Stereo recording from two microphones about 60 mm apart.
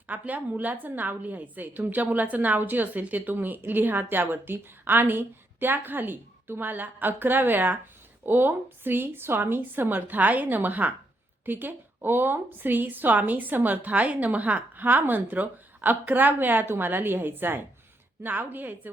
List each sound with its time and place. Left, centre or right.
0.1 s a woman's voice: right